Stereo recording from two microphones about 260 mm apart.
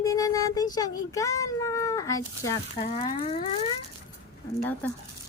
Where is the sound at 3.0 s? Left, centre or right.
Left.